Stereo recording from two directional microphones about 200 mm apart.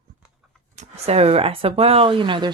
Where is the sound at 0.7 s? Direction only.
35° right (ahead or behind).